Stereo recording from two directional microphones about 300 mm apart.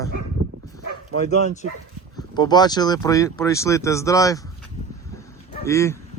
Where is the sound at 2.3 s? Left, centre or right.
Centre.